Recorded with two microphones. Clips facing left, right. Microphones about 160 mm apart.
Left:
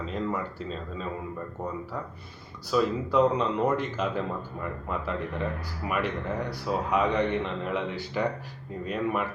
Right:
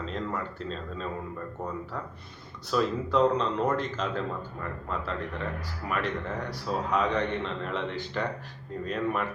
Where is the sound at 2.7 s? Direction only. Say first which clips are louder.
Left 2 dB; 10° left (ahead or behind).